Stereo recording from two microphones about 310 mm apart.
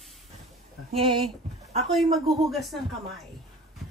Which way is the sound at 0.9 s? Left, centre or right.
Centre.